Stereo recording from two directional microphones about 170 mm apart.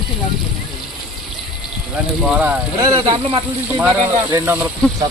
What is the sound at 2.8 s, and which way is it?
Speech, 25° right (ahead or behind).